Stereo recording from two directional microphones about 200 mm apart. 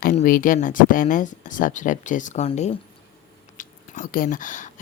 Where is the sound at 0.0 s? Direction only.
45° left (ahead or behind).